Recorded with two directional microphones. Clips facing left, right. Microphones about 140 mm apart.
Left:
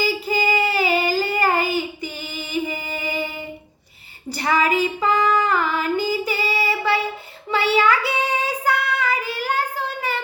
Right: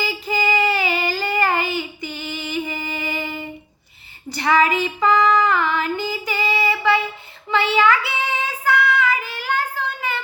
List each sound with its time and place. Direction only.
0.0 s child singing: 40° left (ahead or behind)
2.3 s music: 40° left (ahead or behind)
4.4 s female singing: 40° left (ahead or behind)
7.5 s child singing: 40° left (ahead or behind)